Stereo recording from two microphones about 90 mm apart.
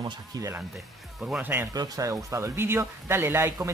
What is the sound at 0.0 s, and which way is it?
Speech, 50° right (ahead or behind).